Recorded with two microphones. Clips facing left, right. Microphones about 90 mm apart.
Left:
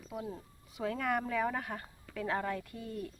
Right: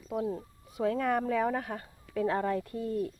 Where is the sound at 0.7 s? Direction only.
35° right (ahead or behind).